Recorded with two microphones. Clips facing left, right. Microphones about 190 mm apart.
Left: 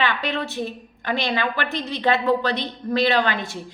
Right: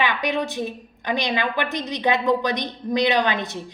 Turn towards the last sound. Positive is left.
turn(degrees=-20)  # may be behind; listen again after turning